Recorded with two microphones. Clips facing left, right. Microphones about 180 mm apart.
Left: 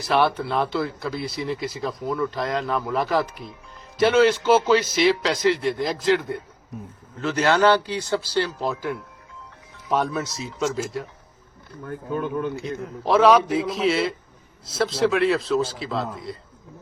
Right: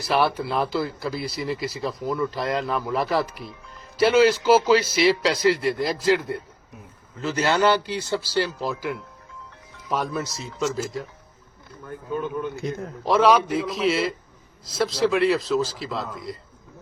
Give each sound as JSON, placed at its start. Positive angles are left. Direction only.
{"t": 0.0, "sound": "speech", "side_deg": 0}
{"t": 9.9, "sound": "speech", "side_deg": 0}
{"t": 12.6, "sound": "a man's voice", "side_deg": -40}
{"t": 13.1, "sound": "speech", "side_deg": 0}